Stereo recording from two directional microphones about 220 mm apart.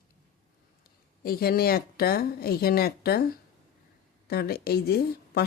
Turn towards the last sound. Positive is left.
turn(degrees=45)  # may be behind; listen again after turning